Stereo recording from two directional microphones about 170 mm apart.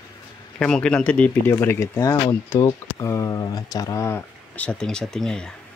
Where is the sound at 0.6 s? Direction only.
5° left (ahead or behind).